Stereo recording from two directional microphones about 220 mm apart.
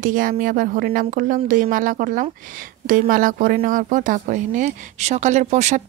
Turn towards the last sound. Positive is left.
turn(degrees=-30)  # may be behind; listen again after turning